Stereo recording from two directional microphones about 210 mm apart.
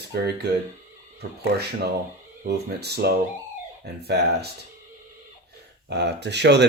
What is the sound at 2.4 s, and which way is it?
Speech, 50° right (ahead or behind).